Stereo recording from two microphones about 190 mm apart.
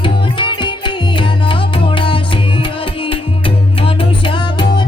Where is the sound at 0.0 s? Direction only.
25° left (ahead or behind).